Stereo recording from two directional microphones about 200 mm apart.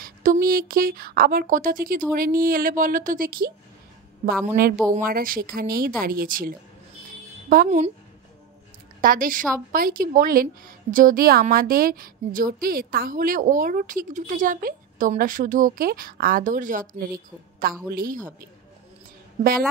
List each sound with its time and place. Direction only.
0.0 s a woman's voice: 45° right (ahead or behind)
9.0 s a woman's voice: 45° right (ahead or behind)